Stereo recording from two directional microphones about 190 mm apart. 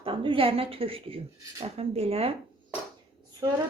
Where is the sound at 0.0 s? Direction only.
25° right (ahead or behind).